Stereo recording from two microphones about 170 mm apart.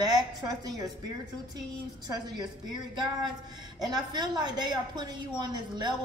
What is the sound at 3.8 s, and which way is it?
A woman's voice, 25° right (ahead or behind).